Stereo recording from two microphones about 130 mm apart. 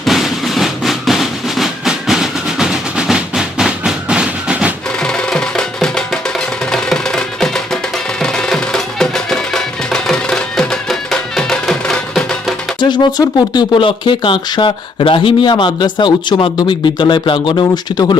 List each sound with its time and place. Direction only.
0.0 s drum: centre (ahead or behind)
5.0 s music: 5° left (ahead or behind)
12.8 s speech: 35° left (ahead or behind)